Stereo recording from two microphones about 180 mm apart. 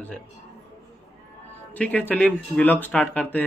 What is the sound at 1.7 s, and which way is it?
Speech, 10° left (ahead or behind).